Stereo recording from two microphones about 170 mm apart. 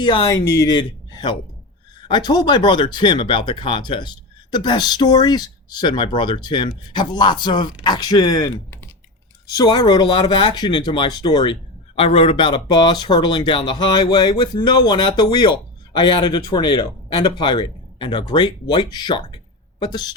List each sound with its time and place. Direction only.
0.0 s speech: 30° left (ahead or behind)